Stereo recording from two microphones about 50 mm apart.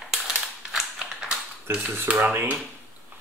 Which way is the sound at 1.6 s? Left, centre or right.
Right.